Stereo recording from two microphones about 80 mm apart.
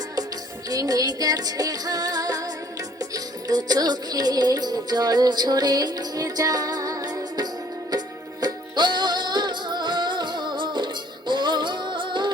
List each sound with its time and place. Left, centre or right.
0.7 s music: right